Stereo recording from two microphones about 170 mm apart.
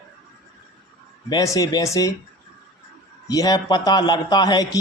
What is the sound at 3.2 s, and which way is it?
A man's voice, 20° left (ahead or behind).